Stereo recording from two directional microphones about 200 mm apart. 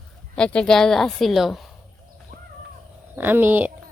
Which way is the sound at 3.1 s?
10° right (ahead or behind).